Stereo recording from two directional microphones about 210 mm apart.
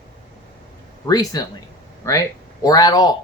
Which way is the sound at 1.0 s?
20° left (ahead or behind).